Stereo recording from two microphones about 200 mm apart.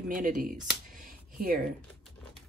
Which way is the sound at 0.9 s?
45° right (ahead or behind).